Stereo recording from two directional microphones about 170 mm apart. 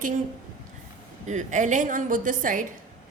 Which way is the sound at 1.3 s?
45° right (ahead or behind).